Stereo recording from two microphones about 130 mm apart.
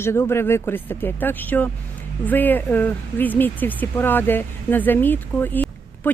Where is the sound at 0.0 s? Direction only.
20° left (ahead or behind).